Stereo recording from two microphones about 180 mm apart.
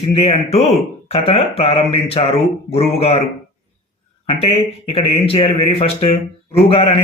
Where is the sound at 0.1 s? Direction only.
35° left (ahead or behind).